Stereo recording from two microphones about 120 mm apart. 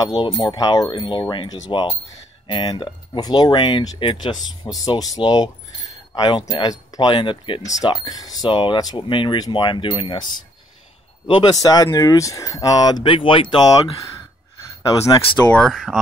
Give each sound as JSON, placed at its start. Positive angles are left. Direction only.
{"t": 0.4, "sound": "speech", "side_deg": 30}
{"t": 7.6, "sound": "speech", "side_deg": 30}
{"t": 11.5, "sound": "speech", "side_deg": 30}
{"t": 14.8, "sound": "speech", "side_deg": 35}
{"t": 15.5, "sound": "speech", "side_deg": 5}